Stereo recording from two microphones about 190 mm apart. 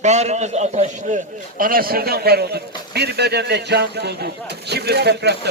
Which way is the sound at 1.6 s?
50° right (ahead or behind).